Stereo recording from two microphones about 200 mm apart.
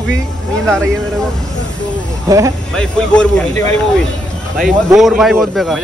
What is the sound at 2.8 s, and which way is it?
A man's voice, 5° left (ahead or behind).